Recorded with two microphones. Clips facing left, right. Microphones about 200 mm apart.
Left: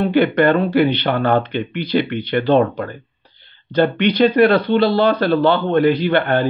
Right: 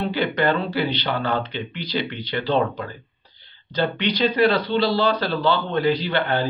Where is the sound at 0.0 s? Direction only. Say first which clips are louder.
Left 7 dB; 55° left (ahead or behind).